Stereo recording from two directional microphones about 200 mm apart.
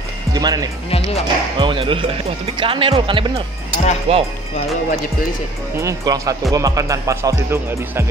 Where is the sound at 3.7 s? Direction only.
35° left (ahead or behind).